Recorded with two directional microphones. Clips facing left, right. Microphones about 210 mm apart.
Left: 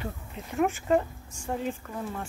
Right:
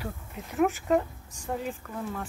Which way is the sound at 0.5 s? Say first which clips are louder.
Even; centre (ahead or behind).